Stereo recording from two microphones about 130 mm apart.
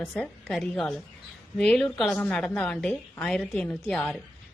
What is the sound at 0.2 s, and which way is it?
Speech, 5° left (ahead or behind).